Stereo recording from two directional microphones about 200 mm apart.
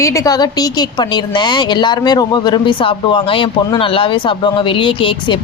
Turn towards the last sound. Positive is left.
turn(degrees=25)  # may be behind; listen again after turning